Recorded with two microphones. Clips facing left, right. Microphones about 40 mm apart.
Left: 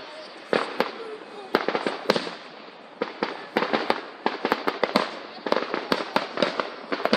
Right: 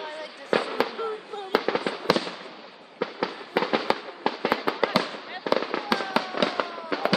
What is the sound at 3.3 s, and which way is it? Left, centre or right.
Fireworks, centre.